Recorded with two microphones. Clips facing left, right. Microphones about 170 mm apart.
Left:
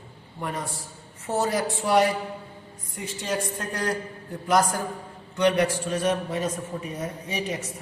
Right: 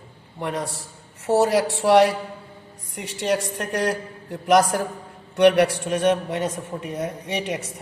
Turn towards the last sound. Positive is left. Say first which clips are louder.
# right 3 dB
turn(degrees=-75)  # may be behind; listen again after turning